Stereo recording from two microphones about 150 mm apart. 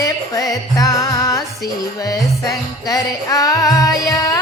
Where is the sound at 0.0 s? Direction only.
20° left (ahead or behind).